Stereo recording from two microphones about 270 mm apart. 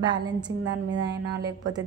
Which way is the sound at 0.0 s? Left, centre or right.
Centre.